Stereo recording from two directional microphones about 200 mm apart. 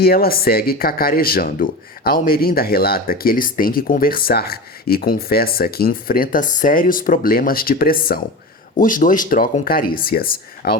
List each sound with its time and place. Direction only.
0.0 s speech: 50° left (ahead or behind)